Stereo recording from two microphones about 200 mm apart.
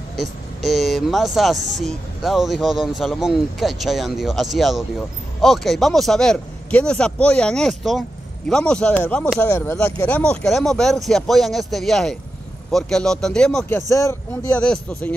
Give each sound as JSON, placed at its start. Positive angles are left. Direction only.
{"t": 0.7, "sound": "speech", "side_deg": 0}
{"t": 13.7, "sound": "speech", "side_deg": 15}